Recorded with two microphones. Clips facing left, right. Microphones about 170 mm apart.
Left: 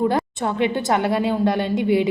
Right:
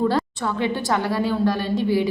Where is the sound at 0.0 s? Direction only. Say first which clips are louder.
Left 1 dB; 20° left (ahead or behind).